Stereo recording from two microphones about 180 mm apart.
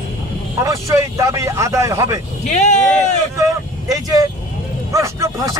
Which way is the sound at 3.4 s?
20° right (ahead or behind).